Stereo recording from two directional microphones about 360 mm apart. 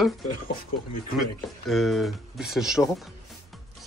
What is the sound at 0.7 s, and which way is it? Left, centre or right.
Speech, left.